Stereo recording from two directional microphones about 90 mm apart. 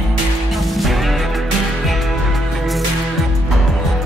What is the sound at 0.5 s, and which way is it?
Music, centre (ahead or behind).